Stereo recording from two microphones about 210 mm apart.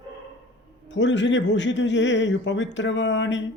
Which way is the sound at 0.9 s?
60° left (ahead or behind).